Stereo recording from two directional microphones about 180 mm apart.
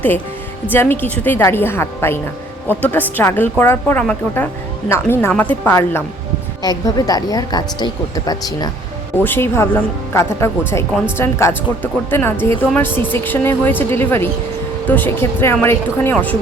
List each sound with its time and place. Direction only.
0.7 s a woman's voice: 10° left (ahead or behind)